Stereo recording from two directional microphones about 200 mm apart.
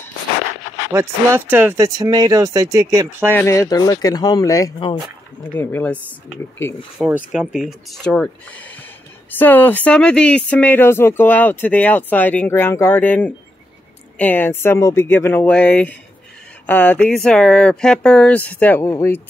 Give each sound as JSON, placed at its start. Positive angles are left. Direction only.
{"t": 0.9, "sound": "speech", "side_deg": -10}
{"t": 3.3, "sound": "speech", "side_deg": 15}
{"t": 7.0, "sound": "speech", "side_deg": -5}